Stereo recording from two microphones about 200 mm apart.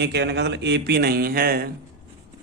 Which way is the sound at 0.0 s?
55° right (ahead or behind).